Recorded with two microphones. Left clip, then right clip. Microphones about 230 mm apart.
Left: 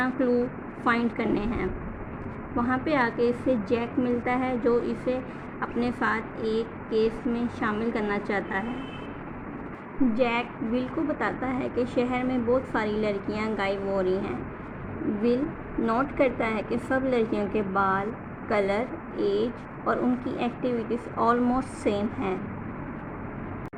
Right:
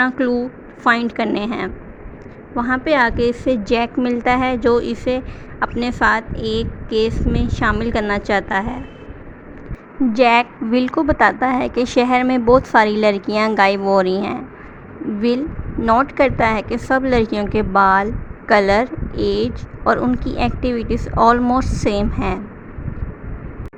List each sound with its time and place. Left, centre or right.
0.0 s a woman's voice: right
10.1 s a woman's voice: right
15.8 s a woman's voice: right